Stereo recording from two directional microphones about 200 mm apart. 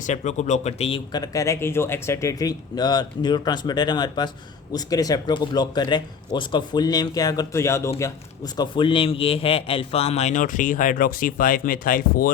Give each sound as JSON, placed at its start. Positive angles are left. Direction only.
{"t": 0.0, "sound": "a man's voice", "side_deg": 35}